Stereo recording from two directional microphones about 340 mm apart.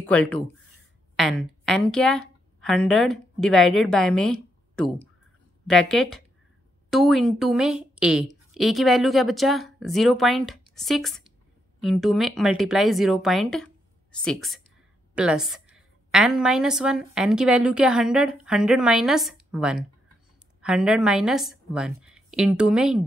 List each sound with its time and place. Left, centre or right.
0.0 s a woman's voice: centre